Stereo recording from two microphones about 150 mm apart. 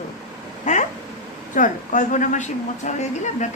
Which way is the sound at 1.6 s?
55° left (ahead or behind).